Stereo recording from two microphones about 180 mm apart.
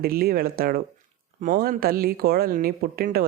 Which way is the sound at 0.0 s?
55° right (ahead or behind).